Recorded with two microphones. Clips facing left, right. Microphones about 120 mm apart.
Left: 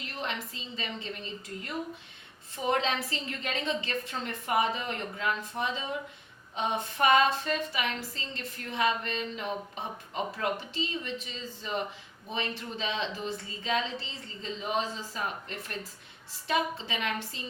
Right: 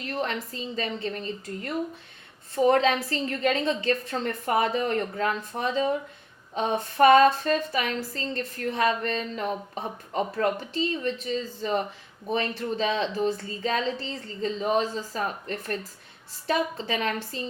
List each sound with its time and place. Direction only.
0.0 s a woman's voice: 40° right (ahead or behind)